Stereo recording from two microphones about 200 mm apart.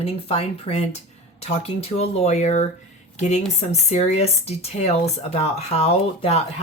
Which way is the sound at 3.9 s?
35° left (ahead or behind).